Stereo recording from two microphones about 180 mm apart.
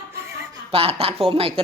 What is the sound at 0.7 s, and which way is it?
Speech, 35° right (ahead or behind).